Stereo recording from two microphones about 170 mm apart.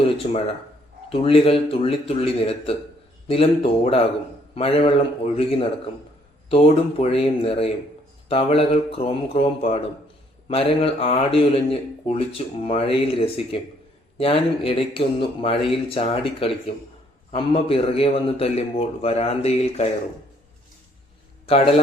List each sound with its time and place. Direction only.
0.0 s speech: 35° left (ahead or behind)
21.4 s a man's voice: 35° left (ahead or behind)